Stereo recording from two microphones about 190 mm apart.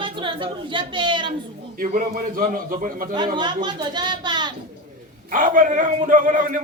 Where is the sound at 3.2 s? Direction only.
25° right (ahead or behind).